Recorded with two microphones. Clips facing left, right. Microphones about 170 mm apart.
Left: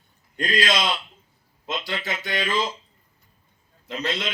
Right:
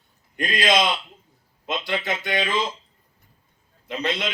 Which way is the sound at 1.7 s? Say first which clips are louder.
Right 3 dB; 55° right (ahead or behind).